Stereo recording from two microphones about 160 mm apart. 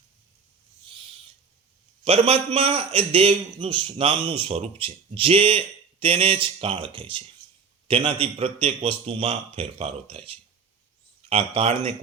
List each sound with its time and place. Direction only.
2.0 s a man's voice: 40° right (ahead or behind)